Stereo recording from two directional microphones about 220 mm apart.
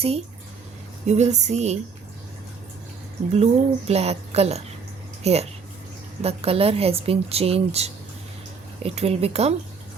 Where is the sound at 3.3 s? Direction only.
30° right (ahead or behind).